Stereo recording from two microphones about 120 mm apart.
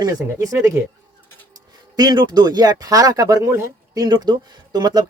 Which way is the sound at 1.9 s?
35° right (ahead or behind).